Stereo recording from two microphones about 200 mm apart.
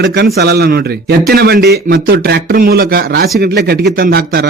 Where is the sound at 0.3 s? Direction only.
55° right (ahead or behind).